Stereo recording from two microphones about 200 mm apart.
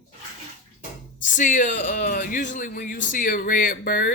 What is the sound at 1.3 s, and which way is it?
Speech, 40° left (ahead or behind).